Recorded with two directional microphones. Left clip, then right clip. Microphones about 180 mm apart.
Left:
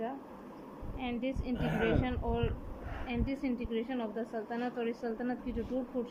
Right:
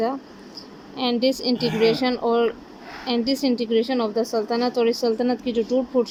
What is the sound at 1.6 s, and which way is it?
Speech, 35° right (ahead or behind).